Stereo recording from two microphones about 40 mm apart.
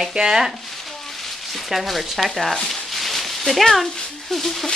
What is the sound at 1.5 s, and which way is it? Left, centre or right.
Speech, centre.